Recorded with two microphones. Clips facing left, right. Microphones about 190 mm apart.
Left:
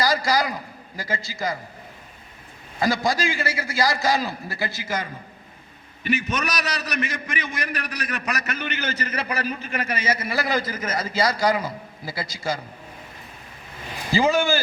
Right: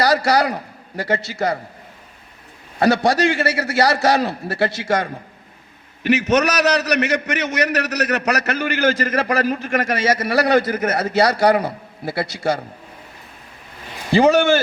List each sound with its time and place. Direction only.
0.0 s a man's voice: 65° right (ahead or behind)
2.7 s a man's voice: 65° right (ahead or behind)
14.1 s speech: 65° right (ahead or behind)